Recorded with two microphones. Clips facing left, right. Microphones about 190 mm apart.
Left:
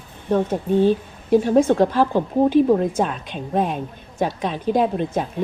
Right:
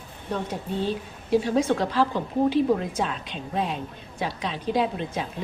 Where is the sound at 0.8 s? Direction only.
50° left (ahead or behind).